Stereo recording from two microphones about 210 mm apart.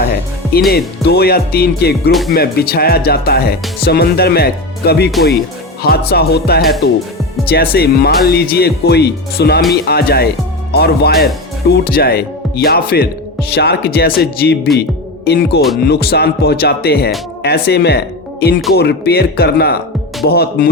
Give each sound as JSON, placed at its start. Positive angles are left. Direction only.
{"t": 0.7, "sound": "speech", "side_deg": 50}